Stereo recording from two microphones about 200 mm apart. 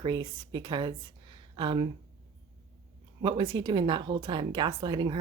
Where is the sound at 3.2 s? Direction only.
25° right (ahead or behind).